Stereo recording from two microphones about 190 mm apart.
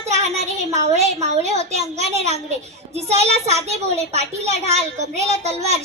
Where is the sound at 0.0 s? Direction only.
35° right (ahead or behind).